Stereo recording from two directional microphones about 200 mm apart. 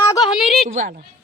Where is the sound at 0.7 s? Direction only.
40° right (ahead or behind).